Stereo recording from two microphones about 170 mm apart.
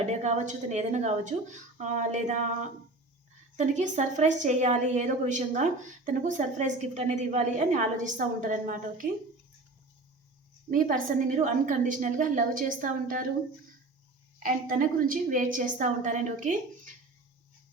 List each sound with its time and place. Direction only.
0.0 s a woman's voice: 40° right (ahead or behind)
10.7 s a woman's voice: 55° right (ahead or behind)
14.3 s a woman's voice: 55° right (ahead or behind)